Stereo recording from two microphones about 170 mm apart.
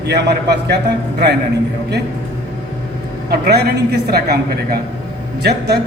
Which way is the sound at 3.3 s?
75° right (ahead or behind).